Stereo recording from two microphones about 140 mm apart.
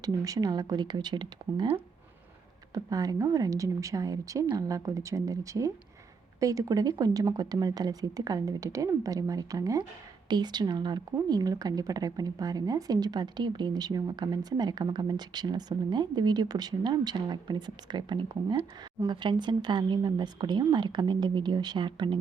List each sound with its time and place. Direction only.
0.0 s speech: 25° right (ahead or behind)
2.7 s a woman's voice: 25° right (ahead or behind)